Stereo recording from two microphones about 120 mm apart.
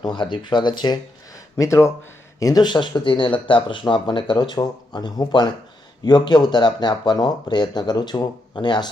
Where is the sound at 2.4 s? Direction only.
35° left (ahead or behind).